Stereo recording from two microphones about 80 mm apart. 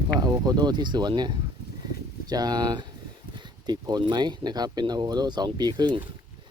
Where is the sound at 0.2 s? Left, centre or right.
Right.